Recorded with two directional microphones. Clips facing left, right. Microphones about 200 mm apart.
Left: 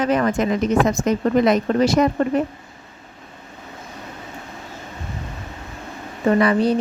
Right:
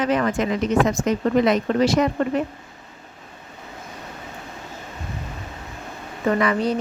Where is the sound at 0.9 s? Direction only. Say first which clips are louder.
Left 2 dB; 45° left (ahead or behind).